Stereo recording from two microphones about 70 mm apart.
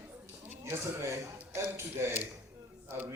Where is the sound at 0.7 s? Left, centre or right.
Right.